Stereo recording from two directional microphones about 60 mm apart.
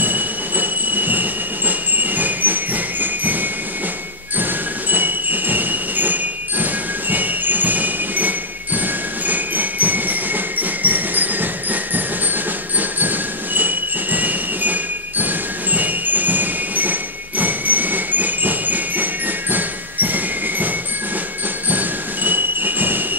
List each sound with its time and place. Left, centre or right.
0.0 s train: right
4.9 s music: right
12.7 s train: right
21.6 s a sound: right